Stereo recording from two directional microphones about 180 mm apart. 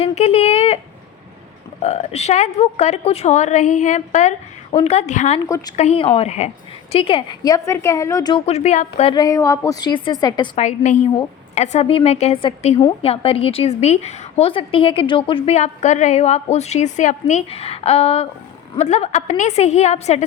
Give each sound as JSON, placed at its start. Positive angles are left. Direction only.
{"t": 0.0, "sound": "a woman's voice", "side_deg": 35}
{"t": 1.8, "sound": "a woman's voice", "side_deg": 40}
{"t": 5.4, "sound": "a woman's voice", "side_deg": 20}
{"t": 5.7, "sound": "a woman's voice", "side_deg": 35}
{"t": 8.4, "sound": "a woman's voice", "side_deg": 40}
{"t": 9.1, "sound": "a woman's voice", "side_deg": 20}
{"t": 10.6, "sound": "a woman's voice", "side_deg": 40}